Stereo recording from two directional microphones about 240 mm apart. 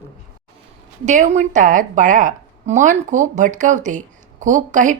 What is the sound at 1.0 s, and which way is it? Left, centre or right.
A woman's voice, right.